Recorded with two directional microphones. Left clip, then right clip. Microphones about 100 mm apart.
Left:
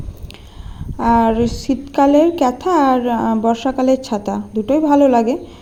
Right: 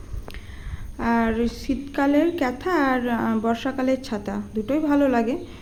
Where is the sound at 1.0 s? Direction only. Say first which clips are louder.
Left 9 dB; 40° left (ahead or behind).